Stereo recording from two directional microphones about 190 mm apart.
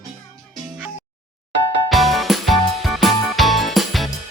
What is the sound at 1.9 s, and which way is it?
Music, centre (ahead or behind).